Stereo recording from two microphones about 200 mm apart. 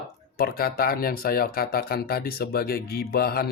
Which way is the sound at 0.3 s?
50° left (ahead or behind).